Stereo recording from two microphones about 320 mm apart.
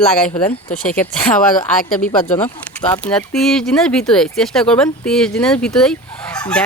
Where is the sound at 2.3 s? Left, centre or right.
Centre.